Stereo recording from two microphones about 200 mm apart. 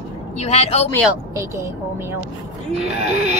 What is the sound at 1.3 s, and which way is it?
Speech, 15° right (ahead or behind).